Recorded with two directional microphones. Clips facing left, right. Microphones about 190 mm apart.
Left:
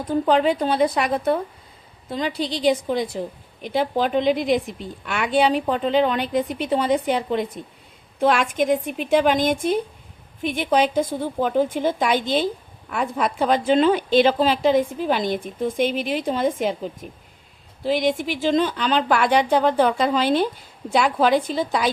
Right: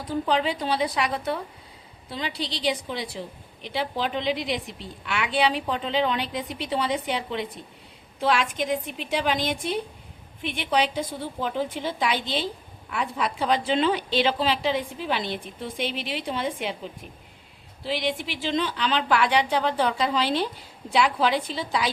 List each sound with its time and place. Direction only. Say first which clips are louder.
0.3 s a woman's voice: left 6 dB; 50° left (ahead or behind)